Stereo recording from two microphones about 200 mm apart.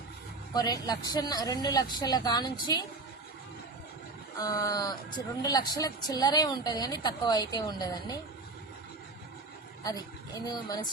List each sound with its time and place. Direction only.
0.5 s speech: 20° left (ahead or behind)
4.4 s speech: 20° left (ahead or behind)
9.8 s speech: 15° left (ahead or behind)